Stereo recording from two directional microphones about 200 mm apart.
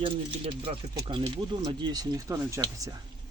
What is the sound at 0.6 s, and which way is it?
Speech, 25° right (ahead or behind).